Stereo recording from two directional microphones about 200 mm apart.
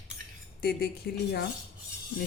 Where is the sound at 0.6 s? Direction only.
50° left (ahead or behind).